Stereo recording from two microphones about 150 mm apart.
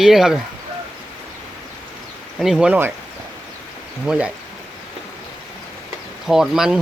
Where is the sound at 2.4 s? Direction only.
5° right (ahead or behind).